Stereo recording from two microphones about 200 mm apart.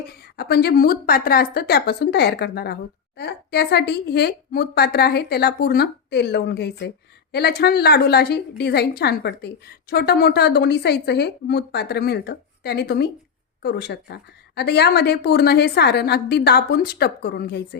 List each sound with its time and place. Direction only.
0.3 s a woman's voice: 55° left (ahead or behind)